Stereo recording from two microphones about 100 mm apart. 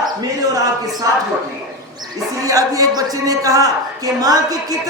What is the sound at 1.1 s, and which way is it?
Speech, 35° right (ahead or behind).